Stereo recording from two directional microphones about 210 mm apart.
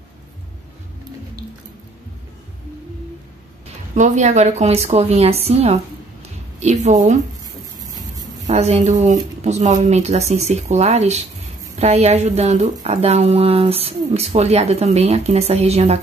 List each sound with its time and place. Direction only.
3.9 s a woman's voice: 35° right (ahead or behind)
8.5 s a woman's voice: 30° right (ahead or behind)